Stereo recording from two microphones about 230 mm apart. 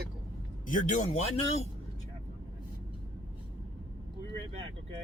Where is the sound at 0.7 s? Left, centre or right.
Left.